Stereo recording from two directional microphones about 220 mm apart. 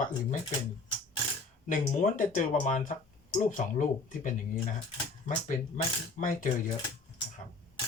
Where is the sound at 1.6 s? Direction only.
35° left (ahead or behind).